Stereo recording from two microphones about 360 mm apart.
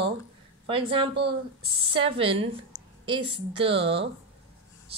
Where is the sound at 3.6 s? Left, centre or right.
Centre.